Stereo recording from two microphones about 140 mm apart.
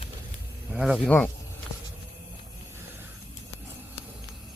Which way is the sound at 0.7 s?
5° right (ahead or behind).